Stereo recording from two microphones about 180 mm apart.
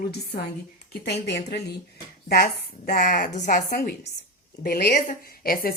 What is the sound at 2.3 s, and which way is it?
A woman's voice, 55° left (ahead or behind).